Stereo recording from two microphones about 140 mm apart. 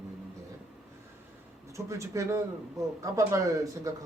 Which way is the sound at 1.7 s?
20° right (ahead or behind).